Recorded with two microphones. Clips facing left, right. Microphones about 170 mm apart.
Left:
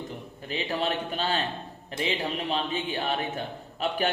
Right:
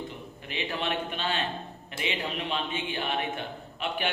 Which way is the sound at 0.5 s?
35° left (ahead or behind).